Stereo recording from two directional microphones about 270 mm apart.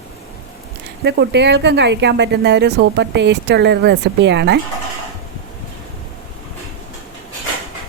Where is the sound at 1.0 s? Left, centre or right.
Right.